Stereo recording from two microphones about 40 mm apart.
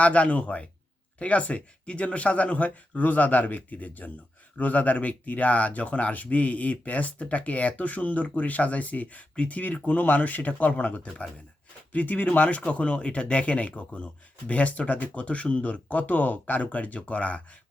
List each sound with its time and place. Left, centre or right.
0.0 s speech: left